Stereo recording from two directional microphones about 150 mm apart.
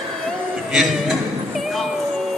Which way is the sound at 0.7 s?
Centre (ahead or behind).